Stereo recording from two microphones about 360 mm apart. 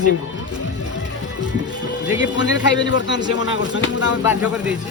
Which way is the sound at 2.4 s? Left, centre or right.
Left.